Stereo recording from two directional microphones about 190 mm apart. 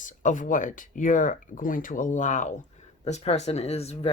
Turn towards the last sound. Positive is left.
turn(degrees=35)  # may be behind; listen again after turning